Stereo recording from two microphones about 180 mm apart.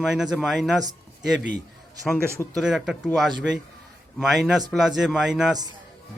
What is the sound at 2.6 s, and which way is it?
Speech, centre (ahead or behind).